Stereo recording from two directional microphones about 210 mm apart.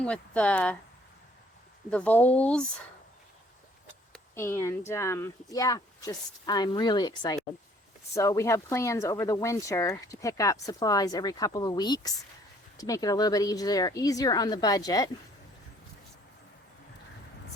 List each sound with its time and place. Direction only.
0.0 s speech: 5° left (ahead or behind)
1.9 s speech: 5° left (ahead or behind)
4.4 s speech: 10° left (ahead or behind)